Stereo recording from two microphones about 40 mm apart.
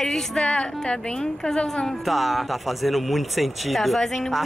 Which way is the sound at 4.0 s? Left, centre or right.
Centre.